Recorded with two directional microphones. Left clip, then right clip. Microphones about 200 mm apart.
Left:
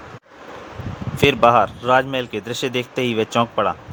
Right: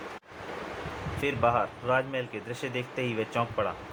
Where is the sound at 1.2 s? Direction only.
55° left (ahead or behind).